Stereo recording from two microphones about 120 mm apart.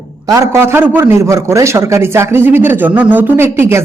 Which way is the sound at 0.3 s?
25° right (ahead or behind).